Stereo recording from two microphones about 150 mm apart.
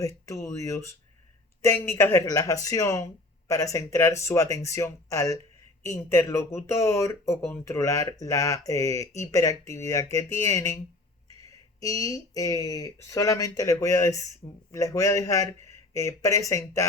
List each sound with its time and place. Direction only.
0.0 s speech: 20° left (ahead or behind)